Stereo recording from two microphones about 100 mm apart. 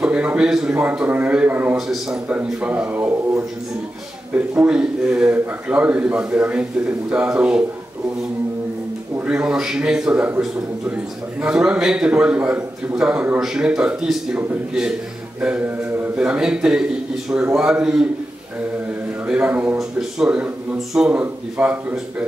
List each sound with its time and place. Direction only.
0.0 s a man's voice: 10° right (ahead or behind)
1.8 s a man's voice: 5° right (ahead or behind)
4.4 s a man's voice: 10° right (ahead or behind)
9.2 s a man's voice: 10° right (ahead or behind)
19.2 s a man's voice: 15° right (ahead or behind)
19.8 s a man's voice: 5° right (ahead or behind)